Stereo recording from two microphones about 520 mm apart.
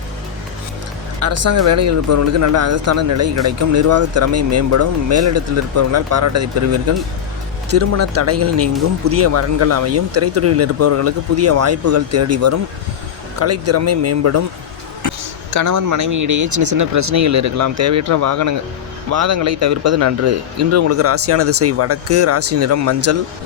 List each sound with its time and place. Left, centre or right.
1.2 s speech: right